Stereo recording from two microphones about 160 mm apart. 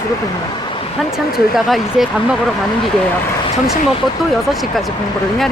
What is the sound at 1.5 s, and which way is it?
Speech, centre (ahead or behind).